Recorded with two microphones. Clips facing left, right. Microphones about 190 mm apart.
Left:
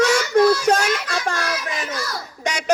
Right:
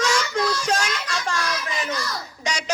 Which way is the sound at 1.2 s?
55° left (ahead or behind).